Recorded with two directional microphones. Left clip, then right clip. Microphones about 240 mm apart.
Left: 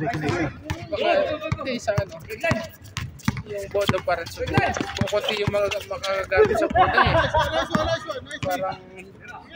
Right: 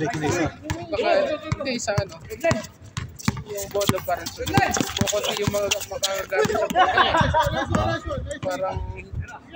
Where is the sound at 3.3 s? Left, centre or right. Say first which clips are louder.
Right 1 dB; right.